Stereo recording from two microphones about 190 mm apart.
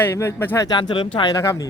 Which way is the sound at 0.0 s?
15° left (ahead or behind).